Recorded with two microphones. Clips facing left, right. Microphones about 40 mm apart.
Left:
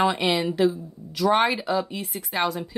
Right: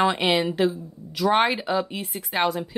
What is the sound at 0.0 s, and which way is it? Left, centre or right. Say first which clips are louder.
Speech: right 1 dB; centre.